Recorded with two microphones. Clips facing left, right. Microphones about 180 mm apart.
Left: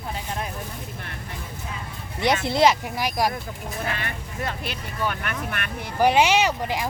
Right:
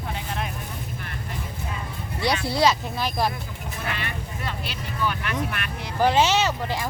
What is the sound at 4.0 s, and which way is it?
Speech, 50° left (ahead or behind).